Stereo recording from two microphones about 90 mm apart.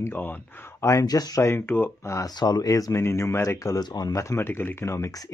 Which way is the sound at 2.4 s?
50° left (ahead or behind).